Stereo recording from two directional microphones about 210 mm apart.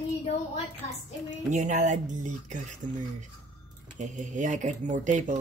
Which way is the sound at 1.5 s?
35° right (ahead or behind).